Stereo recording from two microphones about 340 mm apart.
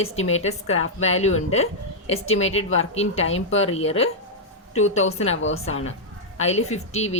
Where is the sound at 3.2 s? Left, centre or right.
Left.